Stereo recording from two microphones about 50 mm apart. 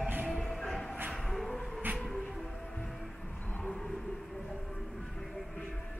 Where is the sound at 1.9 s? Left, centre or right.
Centre.